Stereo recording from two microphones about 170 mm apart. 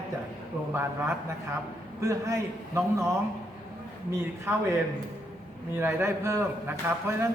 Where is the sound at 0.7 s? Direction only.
15° right (ahead or behind).